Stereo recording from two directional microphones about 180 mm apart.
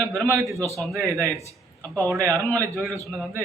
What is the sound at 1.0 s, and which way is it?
A man's voice, 15° right (ahead or behind).